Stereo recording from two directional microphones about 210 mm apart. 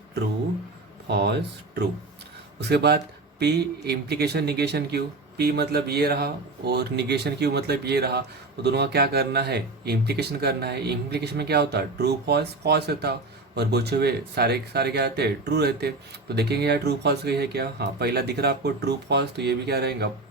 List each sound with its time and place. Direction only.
1.0 s speech: 55° right (ahead or behind)
2.6 s speech: 55° right (ahead or behind)